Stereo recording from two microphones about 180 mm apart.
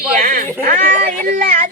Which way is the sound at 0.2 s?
45° right (ahead or behind).